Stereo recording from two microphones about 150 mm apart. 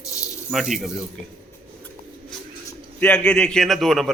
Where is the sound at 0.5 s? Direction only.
Centre (ahead or behind).